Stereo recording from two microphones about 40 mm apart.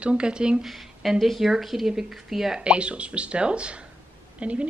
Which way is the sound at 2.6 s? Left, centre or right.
Right.